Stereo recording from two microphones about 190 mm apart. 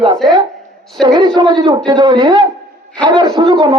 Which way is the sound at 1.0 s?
25° right (ahead or behind).